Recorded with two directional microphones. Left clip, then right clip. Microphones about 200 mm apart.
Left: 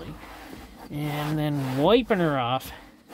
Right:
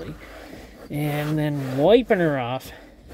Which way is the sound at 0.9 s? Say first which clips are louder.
Right 4 dB; 10° right (ahead or behind).